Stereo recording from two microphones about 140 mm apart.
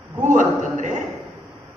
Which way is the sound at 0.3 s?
65° right (ahead or behind).